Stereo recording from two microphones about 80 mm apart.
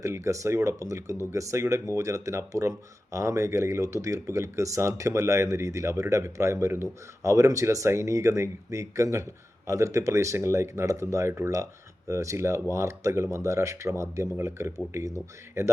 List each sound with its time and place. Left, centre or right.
0.0 s speech: right